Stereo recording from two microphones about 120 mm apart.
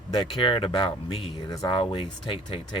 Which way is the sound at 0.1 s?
45° left (ahead or behind).